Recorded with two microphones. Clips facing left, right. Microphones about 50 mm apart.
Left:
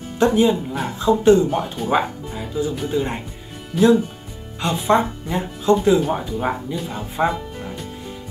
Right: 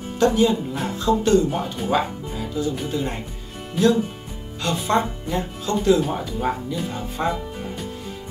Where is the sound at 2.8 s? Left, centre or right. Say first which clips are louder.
Left 3 dB; centre.